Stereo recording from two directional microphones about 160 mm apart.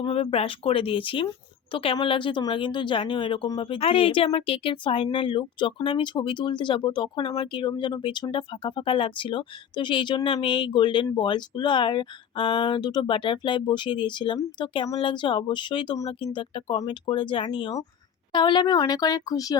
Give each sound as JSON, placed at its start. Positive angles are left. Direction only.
{"t": 0.0, "sound": "a woman's voice", "side_deg": 35}